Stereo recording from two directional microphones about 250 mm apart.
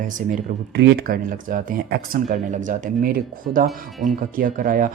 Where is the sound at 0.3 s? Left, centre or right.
Right.